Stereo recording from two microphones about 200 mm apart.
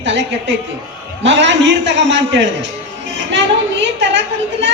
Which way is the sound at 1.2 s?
65° right (ahead or behind).